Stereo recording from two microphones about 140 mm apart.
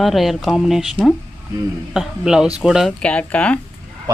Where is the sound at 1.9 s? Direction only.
5° right (ahead or behind).